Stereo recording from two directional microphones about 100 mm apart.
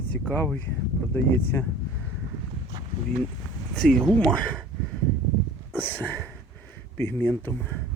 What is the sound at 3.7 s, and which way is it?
Speech, 10° left (ahead or behind).